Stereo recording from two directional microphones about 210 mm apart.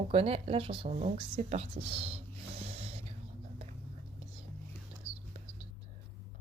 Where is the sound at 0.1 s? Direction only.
30° right (ahead or behind).